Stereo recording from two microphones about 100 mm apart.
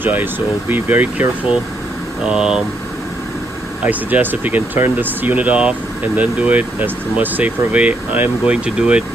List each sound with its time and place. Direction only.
0.0 s speech: 20° right (ahead or behind)
2.2 s speech: 10° right (ahead or behind)
3.8 s speech: 15° right (ahead or behind)